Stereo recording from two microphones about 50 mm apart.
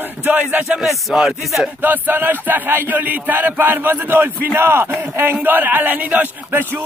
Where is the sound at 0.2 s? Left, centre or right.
Right.